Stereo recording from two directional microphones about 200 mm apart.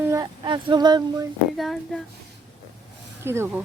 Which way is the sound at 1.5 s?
Centre (ahead or behind).